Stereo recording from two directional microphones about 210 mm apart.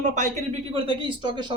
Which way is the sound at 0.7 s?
20° right (ahead or behind).